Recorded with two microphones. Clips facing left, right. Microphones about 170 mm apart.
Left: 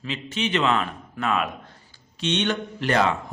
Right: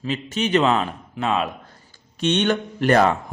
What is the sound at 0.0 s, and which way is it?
A man's voice, 45° right (ahead or behind).